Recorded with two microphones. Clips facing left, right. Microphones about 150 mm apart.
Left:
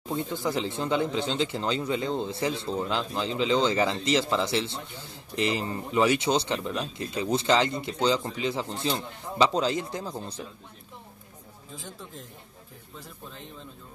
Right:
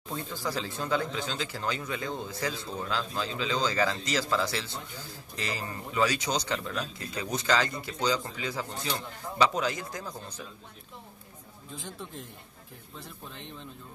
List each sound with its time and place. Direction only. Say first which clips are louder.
0.1 s speech: left 5 dB; 20° left (ahead or behind)
11.7 s speech: right 1 dB; centre (ahead or behind)